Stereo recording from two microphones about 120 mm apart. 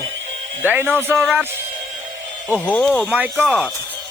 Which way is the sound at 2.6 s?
10° left (ahead or behind).